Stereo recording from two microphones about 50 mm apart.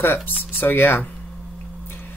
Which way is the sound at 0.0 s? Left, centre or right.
Left.